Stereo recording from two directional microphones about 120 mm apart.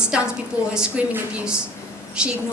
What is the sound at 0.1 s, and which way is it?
A woman's voice, 10° right (ahead or behind).